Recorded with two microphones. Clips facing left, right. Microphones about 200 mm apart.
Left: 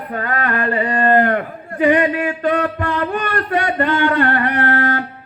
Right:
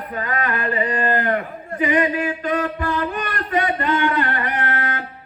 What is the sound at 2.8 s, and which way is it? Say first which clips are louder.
Music: left 3 dB; 60° left (ahead or behind).